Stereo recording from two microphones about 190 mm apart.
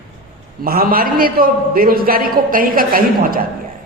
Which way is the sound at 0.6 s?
50° right (ahead or behind).